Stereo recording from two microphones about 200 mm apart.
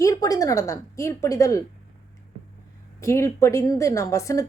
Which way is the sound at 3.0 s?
15° left (ahead or behind).